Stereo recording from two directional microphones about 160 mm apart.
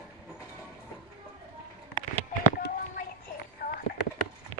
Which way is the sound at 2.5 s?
65° left (ahead or behind).